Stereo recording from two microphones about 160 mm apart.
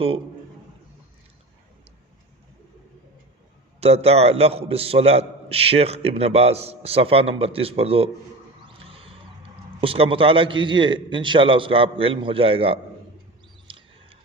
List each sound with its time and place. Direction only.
3.8 s a man's voice: 40° right (ahead or behind)
8.6 s music: 35° right (ahead or behind)
9.8 s a man's voice: 35° right (ahead or behind)
13.7 s a sound: 35° right (ahead or behind)